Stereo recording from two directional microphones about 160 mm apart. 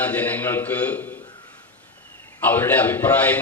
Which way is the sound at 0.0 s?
10° left (ahead or behind).